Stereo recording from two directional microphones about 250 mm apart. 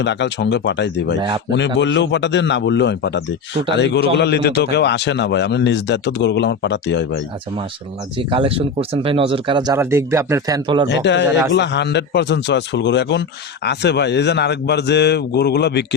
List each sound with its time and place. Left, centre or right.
0.0 s speech: left
8.2 s speech: right
10.8 s a man's voice: left